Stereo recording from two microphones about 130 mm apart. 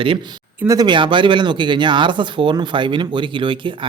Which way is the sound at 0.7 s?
35° right (ahead or behind).